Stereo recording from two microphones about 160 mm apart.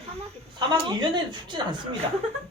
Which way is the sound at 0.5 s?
30° right (ahead or behind).